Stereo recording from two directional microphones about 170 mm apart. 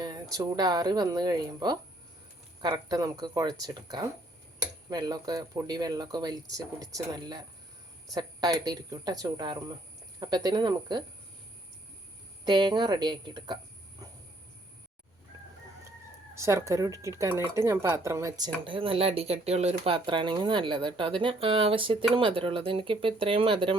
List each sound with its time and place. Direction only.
0.0 s speech: 20° right (ahead or behind)
12.5 s speech: 25° right (ahead or behind)
16.3 s speech: 15° right (ahead or behind)